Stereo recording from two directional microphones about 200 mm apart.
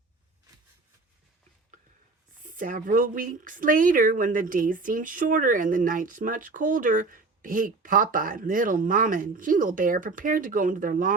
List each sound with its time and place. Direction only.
2.5 s a woman's voice: 40° right (ahead or behind)